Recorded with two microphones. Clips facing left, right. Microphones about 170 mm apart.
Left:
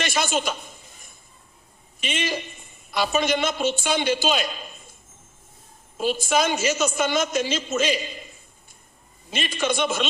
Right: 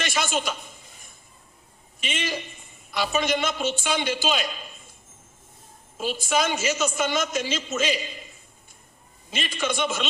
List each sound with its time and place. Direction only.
0.0 s a man's voice: 40° left (ahead or behind)
2.0 s a woman's voice: 40° left (ahead or behind)
6.2 s a woman's voice: 40° left (ahead or behind)
9.3 s a woman's voice: 40° left (ahead or behind)